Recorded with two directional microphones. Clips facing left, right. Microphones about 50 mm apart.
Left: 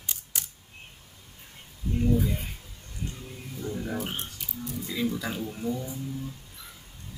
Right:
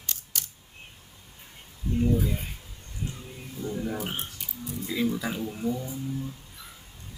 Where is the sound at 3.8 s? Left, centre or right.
Centre.